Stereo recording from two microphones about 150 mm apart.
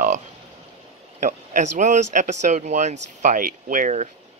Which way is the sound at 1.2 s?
55° right (ahead or behind).